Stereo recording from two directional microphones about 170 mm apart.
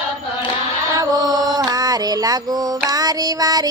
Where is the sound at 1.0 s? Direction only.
25° right (ahead or behind).